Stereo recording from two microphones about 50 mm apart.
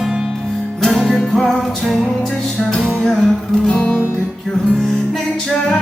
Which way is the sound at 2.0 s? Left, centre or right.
Centre.